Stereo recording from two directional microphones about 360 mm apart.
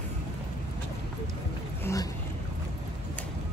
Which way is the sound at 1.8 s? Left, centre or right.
Centre.